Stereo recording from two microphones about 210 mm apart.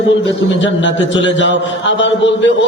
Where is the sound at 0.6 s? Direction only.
60° left (ahead or behind).